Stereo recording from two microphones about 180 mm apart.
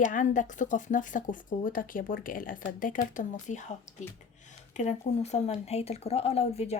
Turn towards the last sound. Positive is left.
turn(degrees=35)  # may be behind; listen again after turning